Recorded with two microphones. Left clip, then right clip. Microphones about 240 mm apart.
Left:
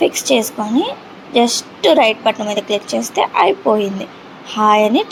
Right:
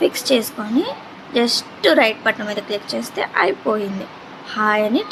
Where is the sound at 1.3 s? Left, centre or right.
Centre.